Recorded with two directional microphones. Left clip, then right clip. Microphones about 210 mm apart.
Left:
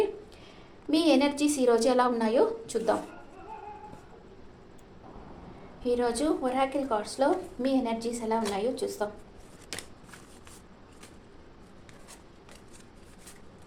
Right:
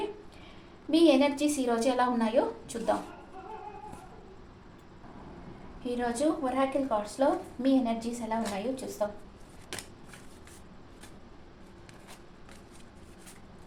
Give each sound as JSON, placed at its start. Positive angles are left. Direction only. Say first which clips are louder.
{"t": 0.9, "sound": "a woman's voice", "louder": "right 1 dB", "side_deg": 35}
{"t": 6.0, "sound": "a woman's voice", "louder": "right 2 dB", "side_deg": 40}